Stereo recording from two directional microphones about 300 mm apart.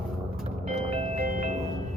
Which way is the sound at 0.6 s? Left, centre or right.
Centre.